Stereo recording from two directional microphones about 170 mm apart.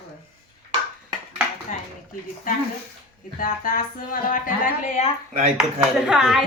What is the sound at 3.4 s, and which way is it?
Speech, 50° left (ahead or behind).